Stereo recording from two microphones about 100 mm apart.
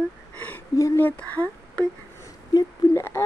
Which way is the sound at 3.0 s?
25° left (ahead or behind).